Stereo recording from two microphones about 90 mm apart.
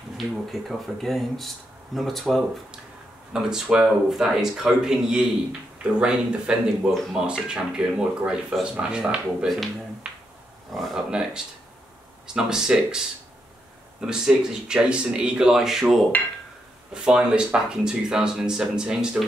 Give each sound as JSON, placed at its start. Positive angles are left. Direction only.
{"t": 0.2, "sound": "speech", "side_deg": 0}
{"t": 6.9, "sound": "speech", "side_deg": 5}
{"t": 7.2, "sound": "speech", "side_deg": -10}
{"t": 10.0, "sound": "finger snapping", "side_deg": -10}
{"t": 10.7, "sound": "speech", "side_deg": 0}
{"t": 14.0, "sound": "speech", "side_deg": -5}